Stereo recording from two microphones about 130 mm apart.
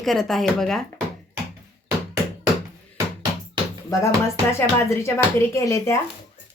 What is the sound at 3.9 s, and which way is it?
Speech, 25° left (ahead or behind).